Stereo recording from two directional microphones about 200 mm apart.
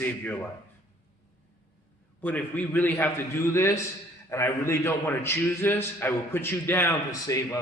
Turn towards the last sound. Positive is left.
turn(degrees=15)  # may be behind; listen again after turning